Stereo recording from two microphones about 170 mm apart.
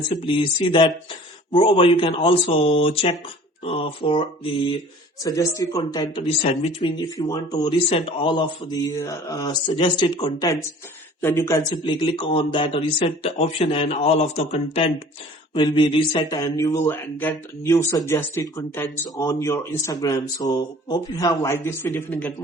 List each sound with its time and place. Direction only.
0.2 s speech: 30° left (ahead or behind)
5.2 s speech: 20° left (ahead or behind)
6.4 s speech: 40° left (ahead or behind); by 11.6 s 15° left (ahead or behind)
11.7 s speech: 30° left (ahead or behind); by 22.3 s 10° left (ahead or behind)